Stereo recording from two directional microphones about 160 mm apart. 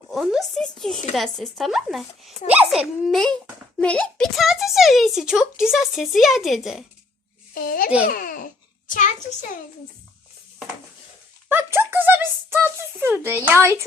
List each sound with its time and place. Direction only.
0.1 s speech: centre (ahead or behind)
7.5 s a child's voice: 65° left (ahead or behind)
11.4 s speech: 15° right (ahead or behind)